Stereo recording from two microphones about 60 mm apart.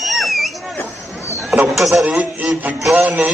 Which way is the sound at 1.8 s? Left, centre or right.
Centre.